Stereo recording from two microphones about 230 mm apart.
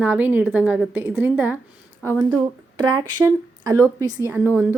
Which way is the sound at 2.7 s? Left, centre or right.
Centre.